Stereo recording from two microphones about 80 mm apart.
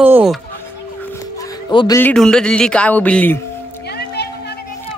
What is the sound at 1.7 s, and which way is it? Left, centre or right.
Speech, left.